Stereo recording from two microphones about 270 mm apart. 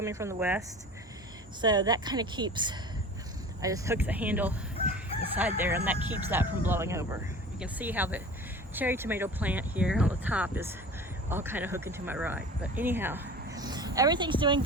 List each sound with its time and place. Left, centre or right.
0.0 s speech: centre
1.6 s speech: centre